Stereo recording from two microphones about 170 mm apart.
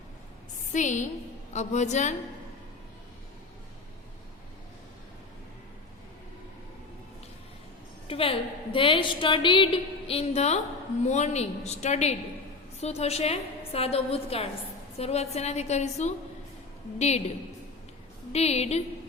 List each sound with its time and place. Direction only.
0.7 s a woman's voice: 45° left (ahead or behind)
8.0 s a woman's voice: 35° left (ahead or behind)
18.3 s a woman's voice: 40° left (ahead or behind)